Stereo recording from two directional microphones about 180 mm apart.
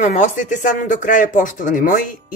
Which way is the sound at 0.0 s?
45° left (ahead or behind).